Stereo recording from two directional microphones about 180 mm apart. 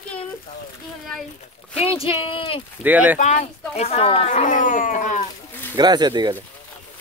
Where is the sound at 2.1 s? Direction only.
30° left (ahead or behind).